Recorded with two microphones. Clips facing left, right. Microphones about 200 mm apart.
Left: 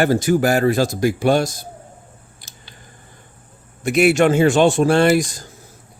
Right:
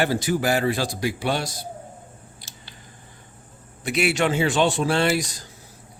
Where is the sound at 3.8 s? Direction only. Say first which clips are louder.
Left 8 dB; 50° left (ahead or behind).